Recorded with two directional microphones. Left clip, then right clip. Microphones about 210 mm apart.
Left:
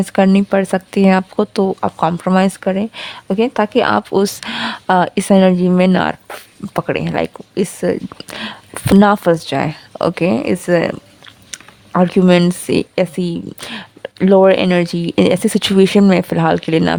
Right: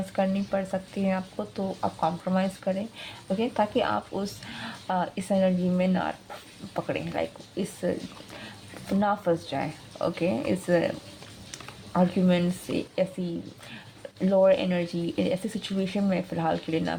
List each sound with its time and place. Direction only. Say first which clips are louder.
0.0 s speech: left 14 dB; 50° left (ahead or behind)